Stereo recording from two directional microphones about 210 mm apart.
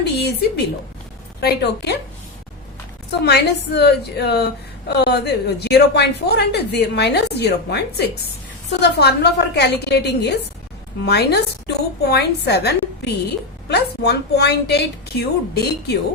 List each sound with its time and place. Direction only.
0.0 s a woman's voice: 50° left (ahead or behind)
3.2 s a woman's voice: 50° left (ahead or behind)